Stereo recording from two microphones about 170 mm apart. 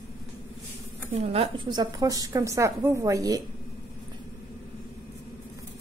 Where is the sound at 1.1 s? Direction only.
40° right (ahead or behind).